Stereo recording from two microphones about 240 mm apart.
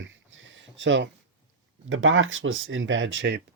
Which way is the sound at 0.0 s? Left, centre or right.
Right.